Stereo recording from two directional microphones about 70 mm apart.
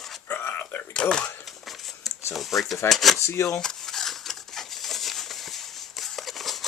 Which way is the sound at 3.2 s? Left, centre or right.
Left.